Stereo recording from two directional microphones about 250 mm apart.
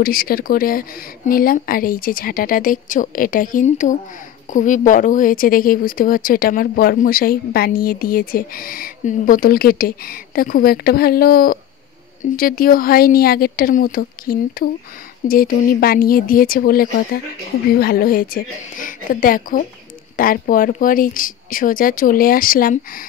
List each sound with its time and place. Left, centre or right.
0.0 s speech: left